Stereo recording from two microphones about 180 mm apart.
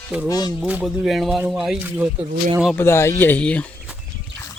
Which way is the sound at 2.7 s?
15° left (ahead or behind).